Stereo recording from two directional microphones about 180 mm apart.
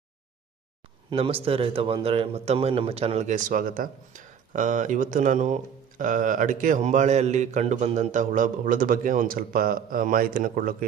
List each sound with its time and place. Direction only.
1.1 s a man's voice: 30° right (ahead or behind); by 10.9 s 55° right (ahead or behind)